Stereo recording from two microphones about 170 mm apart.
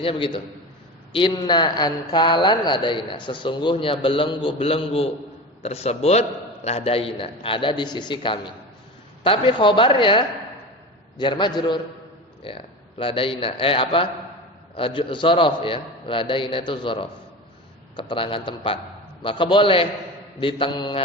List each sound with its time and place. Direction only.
0.0 s a man's voice: 30° left (ahead or behind)